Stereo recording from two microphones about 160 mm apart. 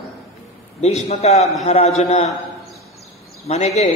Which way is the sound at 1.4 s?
Centre (ahead or behind).